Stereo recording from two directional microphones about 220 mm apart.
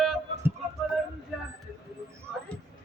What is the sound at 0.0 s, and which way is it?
Music, centre (ahead or behind).